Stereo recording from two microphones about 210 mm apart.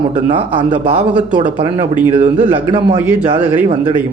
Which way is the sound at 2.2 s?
35° right (ahead or behind).